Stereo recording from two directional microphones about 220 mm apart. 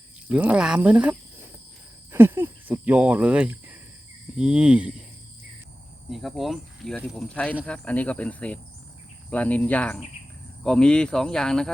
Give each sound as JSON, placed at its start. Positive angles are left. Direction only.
{"t": 0.3, "sound": "speech", "side_deg": -5}
{"t": 2.1, "sound": "speech", "side_deg": -10}
{"t": 6.1, "sound": "speech", "side_deg": 0}